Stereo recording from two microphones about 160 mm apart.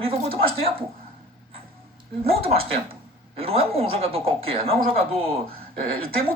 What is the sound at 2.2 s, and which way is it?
Speech, 35° right (ahead or behind).